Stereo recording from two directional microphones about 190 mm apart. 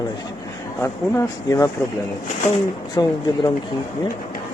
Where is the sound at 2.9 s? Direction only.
20° left (ahead or behind).